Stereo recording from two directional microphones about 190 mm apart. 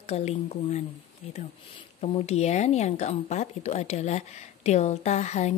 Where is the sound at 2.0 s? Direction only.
35° left (ahead or behind).